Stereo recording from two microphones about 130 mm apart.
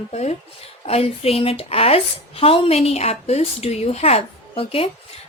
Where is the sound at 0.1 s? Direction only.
60° left (ahead or behind).